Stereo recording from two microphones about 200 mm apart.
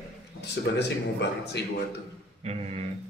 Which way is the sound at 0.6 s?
55° left (ahead or behind).